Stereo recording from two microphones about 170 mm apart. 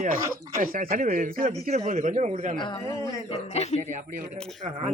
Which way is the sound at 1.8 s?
45° right (ahead or behind).